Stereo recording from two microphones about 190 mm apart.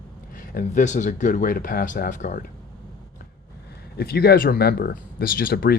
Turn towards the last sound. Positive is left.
turn(degrees=50)  # may be behind; listen again after turning